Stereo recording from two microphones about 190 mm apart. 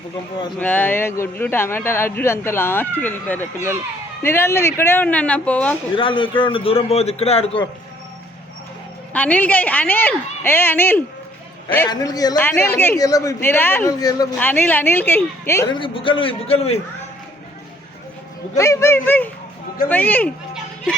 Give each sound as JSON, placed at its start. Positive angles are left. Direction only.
{"t": 0.5, "sound": "speech", "side_deg": 10}
{"t": 6.0, "sound": "a man's voice", "side_deg": 25}
{"t": 9.1, "sound": "a man's voice", "side_deg": 10}
{"t": 14.3, "sound": "speech", "side_deg": 10}
{"t": 18.5, "sound": "speech", "side_deg": 15}